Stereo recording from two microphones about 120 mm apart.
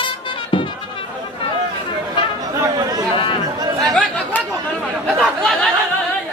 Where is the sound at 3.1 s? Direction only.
45° left (ahead or behind).